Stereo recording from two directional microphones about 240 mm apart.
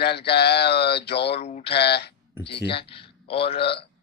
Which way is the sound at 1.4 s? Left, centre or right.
Left.